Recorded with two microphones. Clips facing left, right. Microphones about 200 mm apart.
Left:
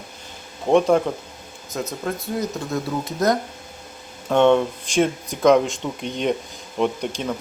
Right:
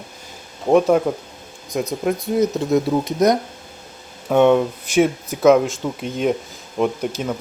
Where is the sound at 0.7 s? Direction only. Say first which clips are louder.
Right 2 dB; 5° right (ahead or behind).